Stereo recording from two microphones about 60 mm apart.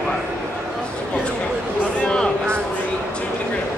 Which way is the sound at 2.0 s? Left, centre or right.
Centre.